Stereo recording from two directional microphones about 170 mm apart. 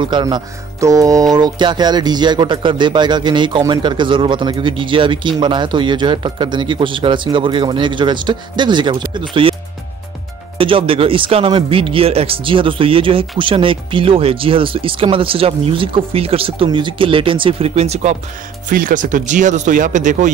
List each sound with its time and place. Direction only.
0.0 s speech: 25° right (ahead or behind)
10.6 s speech: 30° right (ahead or behind)
18.7 s speech: 55° right (ahead or behind)